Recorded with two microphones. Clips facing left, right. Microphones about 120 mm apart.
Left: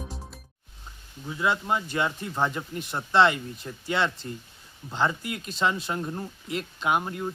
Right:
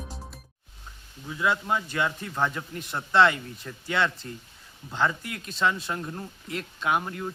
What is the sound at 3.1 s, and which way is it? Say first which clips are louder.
Speech: even; 25° left (ahead or behind).